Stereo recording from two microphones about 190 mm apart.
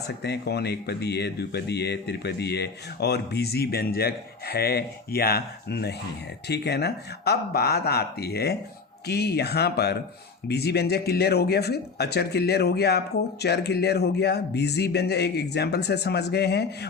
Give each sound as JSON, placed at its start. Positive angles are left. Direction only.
{"t": 0.2, "sound": "speech", "side_deg": 60}